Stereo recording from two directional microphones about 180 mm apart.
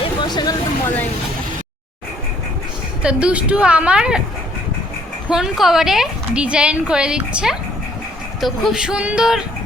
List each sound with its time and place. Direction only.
0.0 s a sound: 25° left (ahead or behind)
3.0 s a woman's voice: 5° right (ahead or behind)
5.3 s a woman's voice: centre (ahead or behind)